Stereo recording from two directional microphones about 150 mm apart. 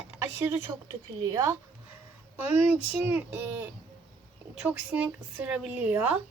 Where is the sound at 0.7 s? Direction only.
20° right (ahead or behind).